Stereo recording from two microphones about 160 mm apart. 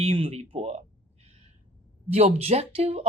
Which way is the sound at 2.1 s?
40° right (ahead or behind).